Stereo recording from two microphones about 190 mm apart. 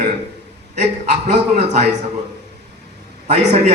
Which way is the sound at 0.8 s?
40° right (ahead or behind).